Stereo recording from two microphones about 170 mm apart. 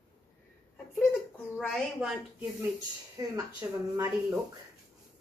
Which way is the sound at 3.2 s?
20° right (ahead or behind).